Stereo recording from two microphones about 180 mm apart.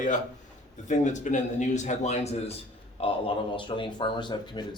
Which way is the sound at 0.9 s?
40° left (ahead or behind).